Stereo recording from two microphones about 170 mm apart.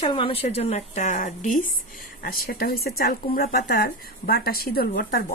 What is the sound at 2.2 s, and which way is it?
Speech, 60° left (ahead or behind).